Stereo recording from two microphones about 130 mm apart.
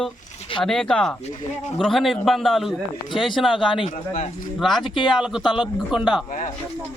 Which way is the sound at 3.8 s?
70° left (ahead or behind).